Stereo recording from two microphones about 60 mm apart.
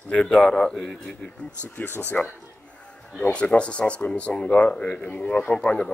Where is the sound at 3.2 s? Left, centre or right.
Centre.